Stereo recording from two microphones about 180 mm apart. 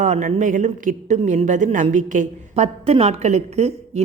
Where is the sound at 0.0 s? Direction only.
40° right (ahead or behind).